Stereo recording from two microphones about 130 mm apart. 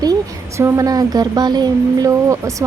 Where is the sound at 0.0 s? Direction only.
25° right (ahead or behind).